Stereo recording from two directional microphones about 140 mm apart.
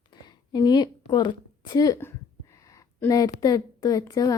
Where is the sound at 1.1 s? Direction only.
35° left (ahead or behind).